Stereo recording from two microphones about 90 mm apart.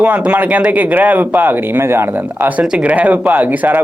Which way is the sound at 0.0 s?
15° right (ahead or behind).